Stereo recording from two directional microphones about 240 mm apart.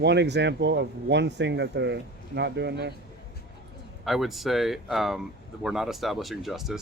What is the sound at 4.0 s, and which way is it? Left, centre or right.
Speech, centre.